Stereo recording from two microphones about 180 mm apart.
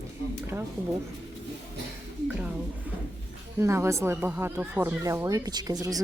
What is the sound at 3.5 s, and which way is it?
A woman's voice, 15° right (ahead or behind).